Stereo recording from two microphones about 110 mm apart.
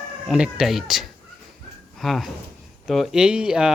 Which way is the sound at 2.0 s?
Centre (ahead or behind).